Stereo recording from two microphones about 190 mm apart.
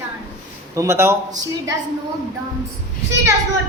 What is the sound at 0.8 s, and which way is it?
Speech, 15° right (ahead or behind).